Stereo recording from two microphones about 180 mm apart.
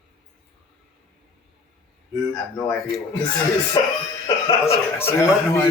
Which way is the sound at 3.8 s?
25° left (ahead or behind).